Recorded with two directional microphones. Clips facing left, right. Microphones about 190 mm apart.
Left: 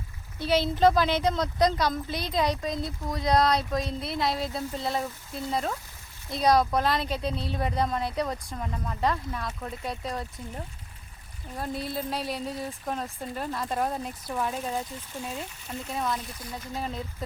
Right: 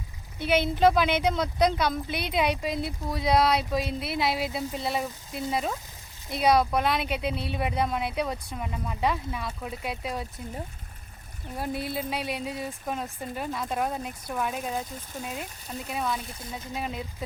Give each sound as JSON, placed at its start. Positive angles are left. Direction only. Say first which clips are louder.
{"t": 0.3, "sound": "speech", "louder": "even", "side_deg": -20}
{"t": 0.8, "sound": "speech", "louder": "even", "side_deg": -5}
{"t": 4.9, "sound": "speech", "louder": "right 1 dB", "side_deg": -15}
{"t": 5.5, "sound": "speech", "louder": "even", "side_deg": 0}
{"t": 11.5, "sound": "speech", "louder": "right 1 dB", "side_deg": -5}
{"t": 15.3, "sound": "speech", "louder": "even", "side_deg": -15}
{"t": 16.0, "sound": "speech", "louder": "even", "side_deg": -5}
{"t": 16.2, "sound": "speech", "louder": "even", "side_deg": -25}
{"t": 16.7, "sound": "speech", "louder": "even", "side_deg": -5}